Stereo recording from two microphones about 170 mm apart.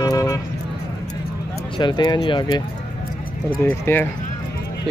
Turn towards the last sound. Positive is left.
turn(degrees=10)  # may be behind; listen again after turning